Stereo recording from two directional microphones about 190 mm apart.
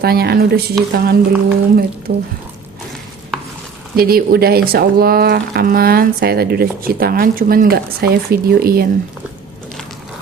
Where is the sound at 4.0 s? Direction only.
55° right (ahead or behind).